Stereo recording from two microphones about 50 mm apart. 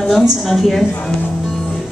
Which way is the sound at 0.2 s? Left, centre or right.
Centre.